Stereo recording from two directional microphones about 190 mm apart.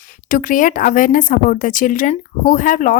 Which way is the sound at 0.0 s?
45° left (ahead or behind).